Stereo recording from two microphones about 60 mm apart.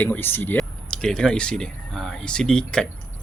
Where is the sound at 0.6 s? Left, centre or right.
Centre.